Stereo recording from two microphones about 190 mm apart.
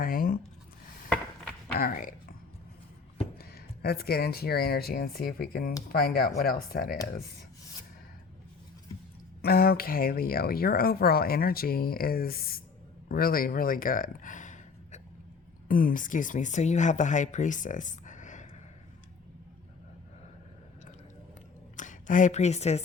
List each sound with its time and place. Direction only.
0.0 s a sound: 50° left (ahead or behind)
1.7 s speech: 50° left (ahead or behind)
3.3 s speech: 55° left (ahead or behind)
9.4 s speech: 55° left (ahead or behind)
21.8 s speech: 40° left (ahead or behind)